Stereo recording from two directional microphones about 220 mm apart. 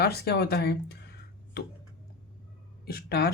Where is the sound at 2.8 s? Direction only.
45° left (ahead or behind).